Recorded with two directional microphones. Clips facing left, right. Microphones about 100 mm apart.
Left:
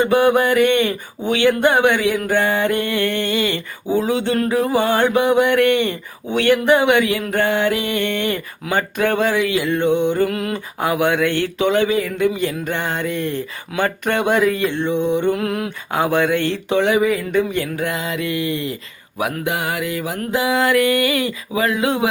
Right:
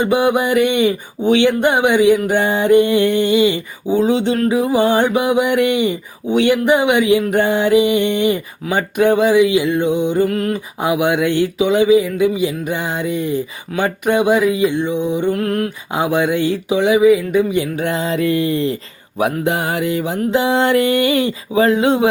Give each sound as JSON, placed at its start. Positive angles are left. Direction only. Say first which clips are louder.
{"t": 0.0, "sound": "mantra", "louder": "even", "side_deg": -15}
{"t": 10.2, "sound": "mantra", "louder": "right 4 dB", "side_deg": 0}
{"t": 10.8, "sound": "mantra", "louder": "right 1 dB", "side_deg": -15}
{"t": 15.9, "sound": "mantra", "louder": "even", "side_deg": -15}
{"t": 17.7, "sound": "mantra", "louder": "right 4 dB", "side_deg": -30}
{"t": 20.3, "sound": "a sound", "louder": "right 2 dB", "side_deg": -30}